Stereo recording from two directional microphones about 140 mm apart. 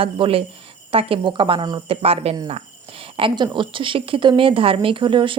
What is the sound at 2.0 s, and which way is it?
Speech, 45° right (ahead or behind).